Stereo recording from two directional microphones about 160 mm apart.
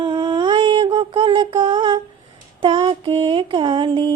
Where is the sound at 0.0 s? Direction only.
30° right (ahead or behind).